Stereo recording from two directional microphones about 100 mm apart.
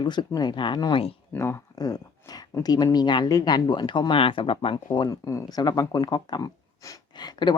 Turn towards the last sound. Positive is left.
turn(degrees=45)  # may be behind; listen again after turning